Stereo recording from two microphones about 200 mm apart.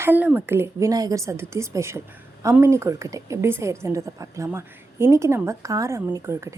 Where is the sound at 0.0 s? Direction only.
10° right (ahead or behind).